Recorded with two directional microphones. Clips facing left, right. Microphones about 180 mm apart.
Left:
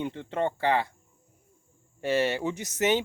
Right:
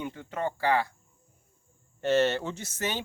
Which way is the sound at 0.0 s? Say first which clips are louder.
Left 4 dB; 30° left (ahead or behind).